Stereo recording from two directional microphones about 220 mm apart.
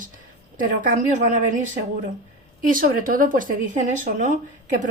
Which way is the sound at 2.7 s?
40° right (ahead or behind).